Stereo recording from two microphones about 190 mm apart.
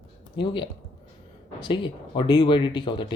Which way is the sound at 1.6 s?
25° left (ahead or behind).